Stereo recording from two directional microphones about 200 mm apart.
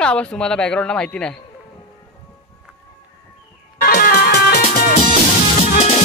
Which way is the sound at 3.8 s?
50° left (ahead or behind).